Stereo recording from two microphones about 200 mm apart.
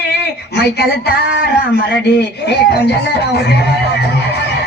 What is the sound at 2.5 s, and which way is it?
Speech, 55° left (ahead or behind).